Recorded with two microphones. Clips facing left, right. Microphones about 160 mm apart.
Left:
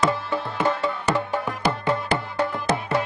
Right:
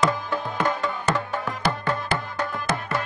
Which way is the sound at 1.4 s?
20° left (ahead or behind).